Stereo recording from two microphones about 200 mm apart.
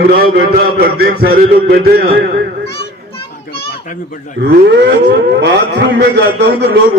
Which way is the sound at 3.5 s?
45° left (ahead or behind).